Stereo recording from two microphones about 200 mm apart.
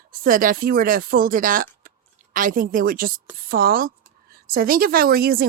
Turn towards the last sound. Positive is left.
turn(degrees=-50)  # may be behind; listen again after turning